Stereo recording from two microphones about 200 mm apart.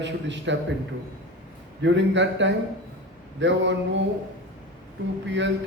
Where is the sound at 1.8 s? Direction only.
65° right (ahead or behind).